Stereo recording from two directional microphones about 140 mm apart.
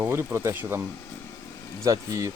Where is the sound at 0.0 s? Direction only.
15° right (ahead or behind).